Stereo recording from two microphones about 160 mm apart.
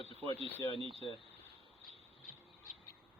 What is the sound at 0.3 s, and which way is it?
Speech, 40° right (ahead or behind).